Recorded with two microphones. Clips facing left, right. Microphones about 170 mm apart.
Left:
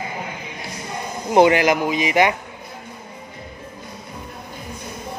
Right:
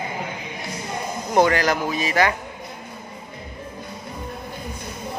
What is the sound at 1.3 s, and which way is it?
A man's voice, 20° left (ahead or behind).